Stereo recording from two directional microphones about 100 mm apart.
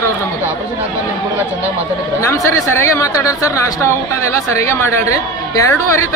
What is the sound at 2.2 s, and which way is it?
A man's voice, 30° left (ahead or behind).